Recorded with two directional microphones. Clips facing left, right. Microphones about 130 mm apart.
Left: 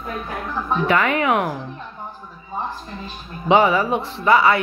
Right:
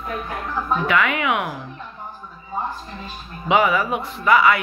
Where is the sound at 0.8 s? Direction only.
35° left (ahead or behind).